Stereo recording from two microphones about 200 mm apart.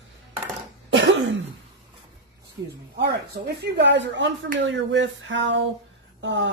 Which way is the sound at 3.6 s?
60° right (ahead or behind).